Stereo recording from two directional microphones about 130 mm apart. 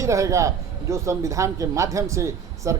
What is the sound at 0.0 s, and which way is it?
Speech, 25° right (ahead or behind).